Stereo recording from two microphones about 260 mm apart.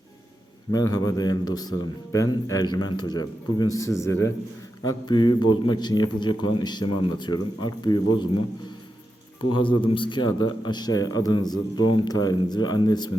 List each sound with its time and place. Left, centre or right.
0.7 s a man's voice: centre
9.5 s a man's voice: centre